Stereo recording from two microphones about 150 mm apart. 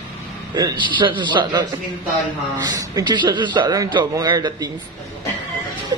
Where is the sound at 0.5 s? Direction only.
30° right (ahead or behind).